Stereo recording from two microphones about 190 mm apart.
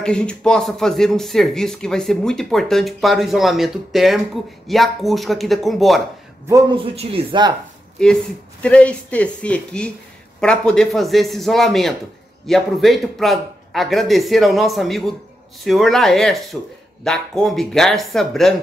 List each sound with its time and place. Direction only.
0.0 s speech: 5° left (ahead or behind)
6.5 s a man's voice: 25° right (ahead or behind)
8.0 s speech: 5° left (ahead or behind)